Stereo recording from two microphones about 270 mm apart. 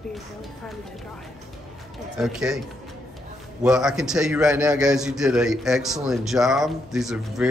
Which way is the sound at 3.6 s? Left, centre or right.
Centre.